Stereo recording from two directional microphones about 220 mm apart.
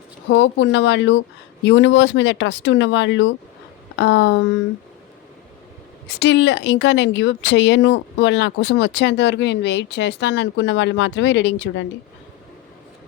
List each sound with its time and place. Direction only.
0.3 s speech: 55° left (ahead or behind)
6.1 s speech: 50° left (ahead or behind)